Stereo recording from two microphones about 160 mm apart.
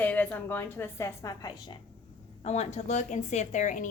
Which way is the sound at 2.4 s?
40° left (ahead or behind).